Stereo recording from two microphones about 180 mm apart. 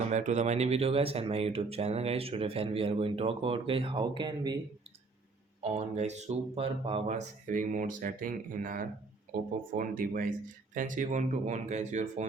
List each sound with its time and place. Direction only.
0.1 s speech: 40° right (ahead or behind); by 4.5 s 25° right (ahead or behind)
5.6 s speech: 40° right (ahead or behind)